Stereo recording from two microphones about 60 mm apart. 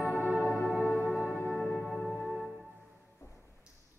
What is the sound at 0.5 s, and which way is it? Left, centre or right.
Music, centre.